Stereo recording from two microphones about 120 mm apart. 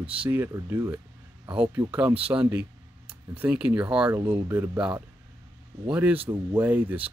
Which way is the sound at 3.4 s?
10° right (ahead or behind).